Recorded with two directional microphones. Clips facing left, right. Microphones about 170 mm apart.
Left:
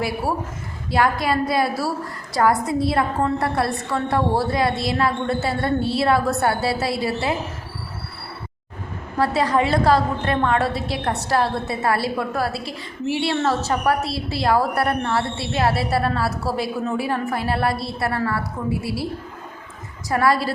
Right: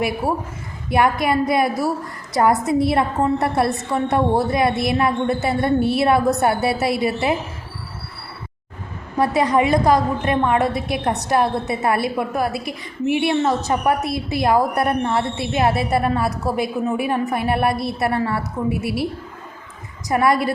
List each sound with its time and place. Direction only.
0.9 s a woman's voice: 20° right (ahead or behind)
9.1 s a woman's voice: 20° right (ahead or behind)
20.1 s a woman's voice: 20° right (ahead or behind)